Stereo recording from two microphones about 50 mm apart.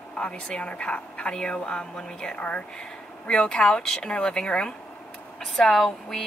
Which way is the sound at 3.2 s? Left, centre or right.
Centre.